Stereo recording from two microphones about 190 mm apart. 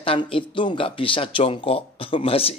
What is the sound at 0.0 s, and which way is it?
Speech, 30° left (ahead or behind).